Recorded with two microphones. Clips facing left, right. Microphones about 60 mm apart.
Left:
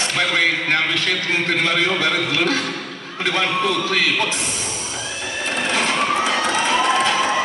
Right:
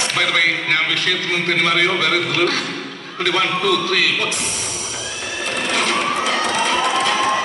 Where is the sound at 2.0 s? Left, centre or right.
Centre.